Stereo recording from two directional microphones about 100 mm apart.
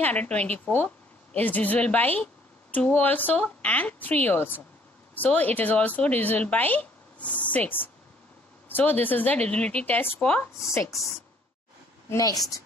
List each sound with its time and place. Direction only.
0.0 s a woman's voice: 15° left (ahead or behind)
10.7 s speech: 30° left (ahead or behind)
12.1 s a woman's voice: 35° left (ahead or behind)